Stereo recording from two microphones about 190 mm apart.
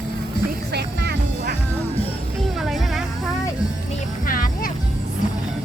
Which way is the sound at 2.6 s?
Centre (ahead or behind).